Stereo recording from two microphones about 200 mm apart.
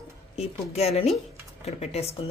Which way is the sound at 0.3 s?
30° left (ahead or behind).